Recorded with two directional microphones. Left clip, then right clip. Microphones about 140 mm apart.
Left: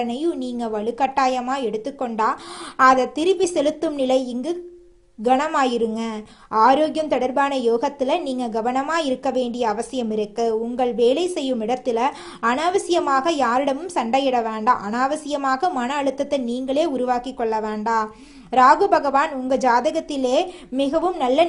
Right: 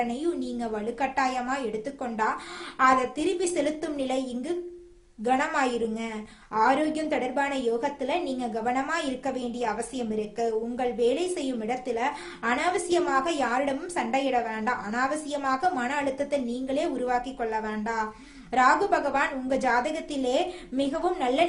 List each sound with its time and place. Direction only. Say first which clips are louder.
0.1 s a woman's voice: left 5 dB; 40° left (ahead or behind)